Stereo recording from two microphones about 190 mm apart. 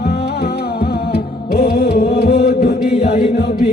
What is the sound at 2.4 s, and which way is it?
Chant, 60° left (ahead or behind).